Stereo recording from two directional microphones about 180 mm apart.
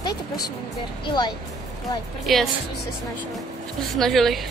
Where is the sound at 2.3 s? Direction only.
Centre (ahead or behind).